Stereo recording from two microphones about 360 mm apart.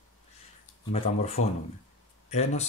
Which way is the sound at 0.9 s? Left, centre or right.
Centre.